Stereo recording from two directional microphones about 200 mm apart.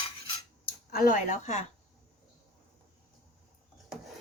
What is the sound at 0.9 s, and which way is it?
Speech, 45° left (ahead or behind).